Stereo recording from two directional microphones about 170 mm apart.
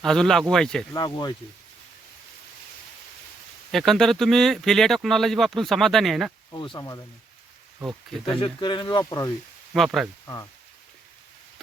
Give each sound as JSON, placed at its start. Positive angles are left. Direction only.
{"t": 0.0, "sound": "speech", "side_deg": 0}
{"t": 0.9, "sound": "speech", "side_deg": 25}
{"t": 3.7, "sound": "speech", "side_deg": 0}
{"t": 6.5, "sound": "speech", "side_deg": 25}
{"t": 8.2, "sound": "speech", "side_deg": 30}
{"t": 9.7, "sound": "speech", "side_deg": 0}